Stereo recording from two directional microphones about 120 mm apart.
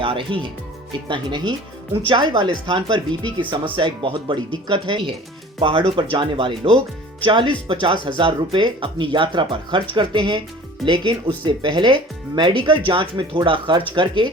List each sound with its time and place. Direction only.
0.0 s speech: 45° right (ahead or behind)